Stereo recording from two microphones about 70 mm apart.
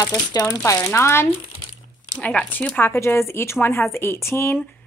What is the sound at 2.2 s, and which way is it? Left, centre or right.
Speech, left.